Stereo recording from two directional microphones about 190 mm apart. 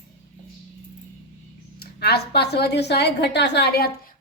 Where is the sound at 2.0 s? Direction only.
55° left (ahead or behind).